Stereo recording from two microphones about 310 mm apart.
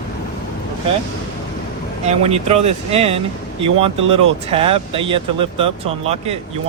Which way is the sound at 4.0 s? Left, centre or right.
Right.